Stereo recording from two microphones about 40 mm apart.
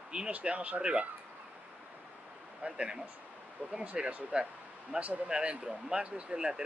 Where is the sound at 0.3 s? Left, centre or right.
Right.